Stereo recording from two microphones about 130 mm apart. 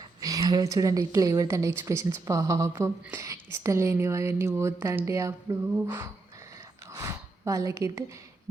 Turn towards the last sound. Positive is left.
turn(degrees=-25)  # may be behind; listen again after turning